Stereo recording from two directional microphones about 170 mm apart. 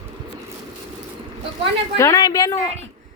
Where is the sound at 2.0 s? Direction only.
20° left (ahead or behind).